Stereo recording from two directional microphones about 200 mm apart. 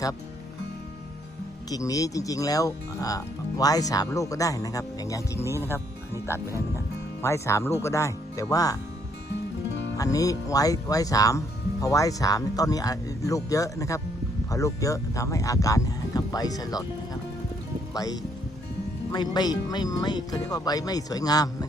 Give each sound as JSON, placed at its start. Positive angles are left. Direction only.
{"t": 1.7, "sound": "speech", "side_deg": 15}
{"t": 10.0, "sound": "speech", "side_deg": 15}
{"t": 17.9, "sound": "speech", "side_deg": 20}